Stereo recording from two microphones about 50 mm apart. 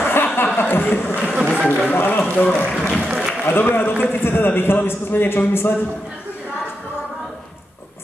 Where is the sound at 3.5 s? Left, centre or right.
Left.